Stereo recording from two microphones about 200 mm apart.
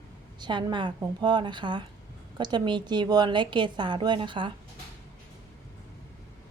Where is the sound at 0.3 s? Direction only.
20° right (ahead or behind).